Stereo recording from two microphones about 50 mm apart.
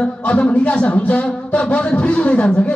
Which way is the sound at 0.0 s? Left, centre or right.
Left.